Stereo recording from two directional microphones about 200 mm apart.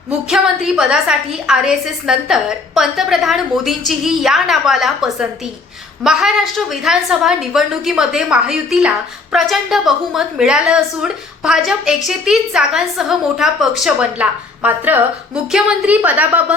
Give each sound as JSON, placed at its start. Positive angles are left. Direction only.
{"t": 0.3, "sound": "a woman's voice", "side_deg": -5}